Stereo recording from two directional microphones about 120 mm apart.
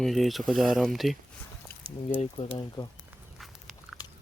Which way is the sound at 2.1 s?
50° left (ahead or behind).